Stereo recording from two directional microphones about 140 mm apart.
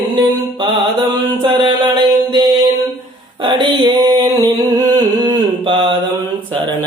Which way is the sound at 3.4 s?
35° right (ahead or behind).